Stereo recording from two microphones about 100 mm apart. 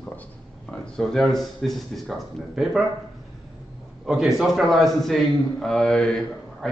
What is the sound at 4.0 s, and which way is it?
A man's voice, 5° right (ahead or behind).